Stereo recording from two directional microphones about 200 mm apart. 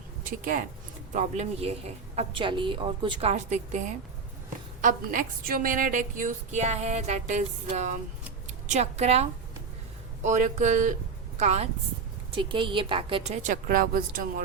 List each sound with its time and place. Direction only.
0.3 s a woman's voice: 45° right (ahead or behind)
10.2 s a woman's voice: 35° right (ahead or behind)
13.4 s speech: 40° right (ahead or behind)